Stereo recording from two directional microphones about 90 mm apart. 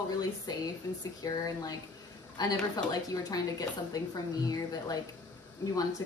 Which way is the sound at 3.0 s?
45° left (ahead or behind).